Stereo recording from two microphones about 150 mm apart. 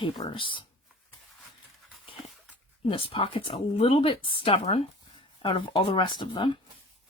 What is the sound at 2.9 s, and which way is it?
Speech, 35° left (ahead or behind).